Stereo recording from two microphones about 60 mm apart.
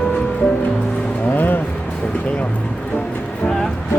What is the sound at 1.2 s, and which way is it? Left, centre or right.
Music, left.